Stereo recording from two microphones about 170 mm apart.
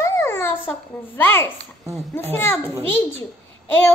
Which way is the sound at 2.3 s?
15° left (ahead or behind).